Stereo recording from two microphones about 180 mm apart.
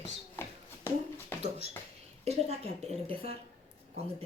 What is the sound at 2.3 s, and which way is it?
A woman's voice, 35° right (ahead or behind).